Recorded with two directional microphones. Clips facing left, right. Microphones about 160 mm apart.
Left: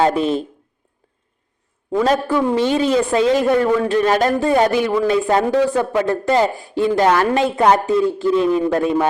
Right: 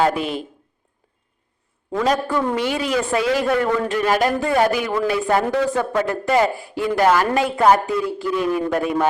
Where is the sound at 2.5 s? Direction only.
25° left (ahead or behind).